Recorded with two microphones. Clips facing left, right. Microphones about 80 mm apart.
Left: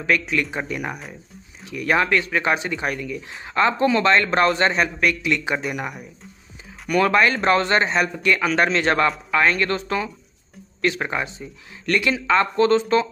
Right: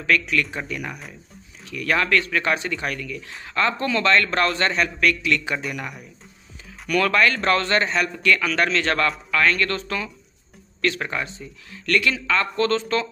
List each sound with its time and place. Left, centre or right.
0.0 s a man's voice: centre